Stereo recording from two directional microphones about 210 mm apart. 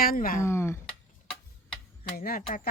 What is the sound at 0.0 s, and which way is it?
Speech, 45° left (ahead or behind).